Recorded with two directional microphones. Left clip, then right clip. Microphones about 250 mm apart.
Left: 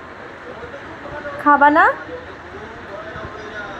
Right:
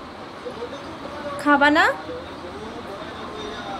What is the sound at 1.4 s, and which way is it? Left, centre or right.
Speech, centre.